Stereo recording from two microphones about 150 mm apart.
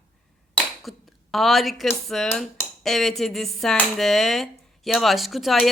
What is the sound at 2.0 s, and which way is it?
Speech, centre (ahead or behind).